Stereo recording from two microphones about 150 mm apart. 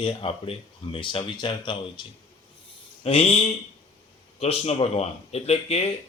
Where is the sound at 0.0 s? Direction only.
40° left (ahead or behind).